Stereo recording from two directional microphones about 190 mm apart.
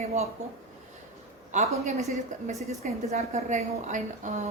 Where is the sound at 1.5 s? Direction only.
35° right (ahead or behind).